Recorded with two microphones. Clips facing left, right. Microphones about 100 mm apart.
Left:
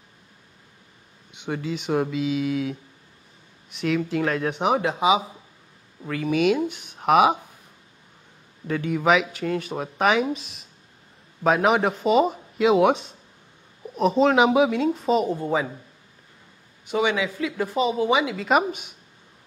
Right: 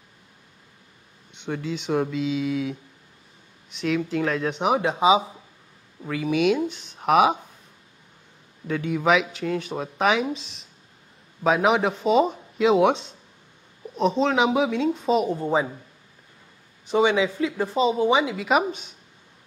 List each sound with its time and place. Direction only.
1.3 s speech: 5° left (ahead or behind)
4.7 s speech: 20° right (ahead or behind)
6.2 s speech: centre (ahead or behind)
8.6 s speech: centre (ahead or behind)
16.8 s speech: 25° right (ahead or behind)